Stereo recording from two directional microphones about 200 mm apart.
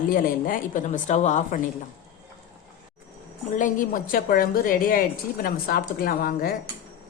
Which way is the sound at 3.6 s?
40° left (ahead or behind).